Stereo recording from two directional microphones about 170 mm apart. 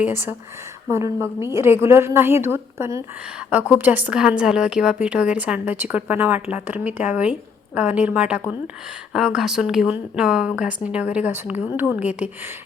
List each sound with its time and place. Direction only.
0.9 s a woman's voice: 15° right (ahead or behind)